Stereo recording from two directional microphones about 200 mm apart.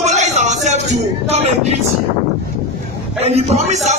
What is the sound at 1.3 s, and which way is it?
Speech, 30° right (ahead or behind).